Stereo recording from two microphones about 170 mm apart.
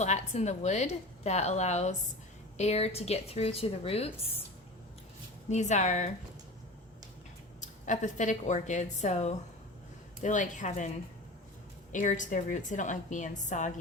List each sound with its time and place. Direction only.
0.0 s a woman's voice: 40° left (ahead or behind)
5.5 s a woman's voice: 45° left (ahead or behind)
7.6 s a woman's voice: 45° left (ahead or behind)